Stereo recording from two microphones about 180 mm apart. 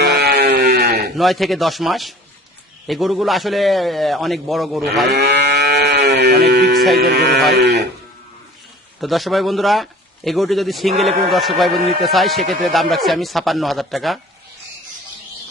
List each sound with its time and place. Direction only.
0.0 s sheep: 65° right (ahead or behind)
1.1 s speech: centre (ahead or behind)
5.0 s cattle: 70° right (ahead or behind)
6.9 s speech: 65° right (ahead or behind)
9.0 s speech: centre (ahead or behind)
10.9 s a man's voice: 35° right (ahead or behind)
11.3 s speech: centre (ahead or behind)